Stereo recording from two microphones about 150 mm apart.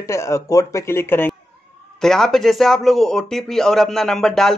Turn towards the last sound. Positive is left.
turn(degrees=5)  # may be behind; listen again after turning